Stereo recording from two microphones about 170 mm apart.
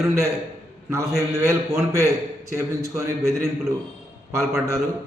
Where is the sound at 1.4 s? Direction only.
15° right (ahead or behind).